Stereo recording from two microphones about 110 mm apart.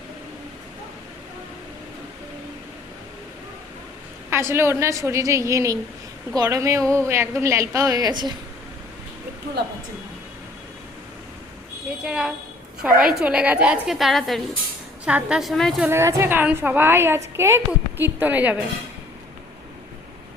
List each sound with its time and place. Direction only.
4.3 s a woman's voice: 25° right (ahead or behind); by 8.3 s 40° right (ahead or behind)
12.0 s a woman's voice: 10° right (ahead or behind)
15.9 s a woman's voice: 25° right (ahead or behind)